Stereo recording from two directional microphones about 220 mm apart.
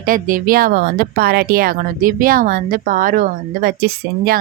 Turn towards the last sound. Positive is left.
turn(degrees=-40)  # may be behind; listen again after turning